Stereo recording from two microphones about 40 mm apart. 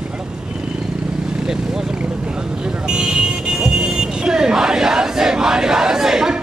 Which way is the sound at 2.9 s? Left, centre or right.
Right.